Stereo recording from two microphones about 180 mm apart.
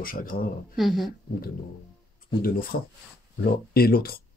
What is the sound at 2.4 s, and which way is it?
Speech, 55° left (ahead or behind).